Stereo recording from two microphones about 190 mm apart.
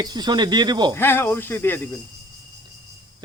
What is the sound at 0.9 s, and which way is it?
Speech, 10° left (ahead or behind).